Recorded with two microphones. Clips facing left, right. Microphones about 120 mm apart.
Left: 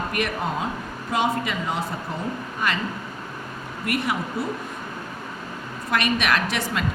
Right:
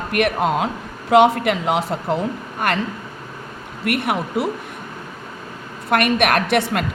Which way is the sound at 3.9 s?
65° right (ahead or behind).